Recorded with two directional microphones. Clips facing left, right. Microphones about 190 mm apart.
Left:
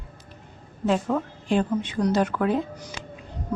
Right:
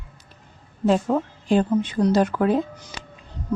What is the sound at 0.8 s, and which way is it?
A woman's voice, 35° right (ahead or behind).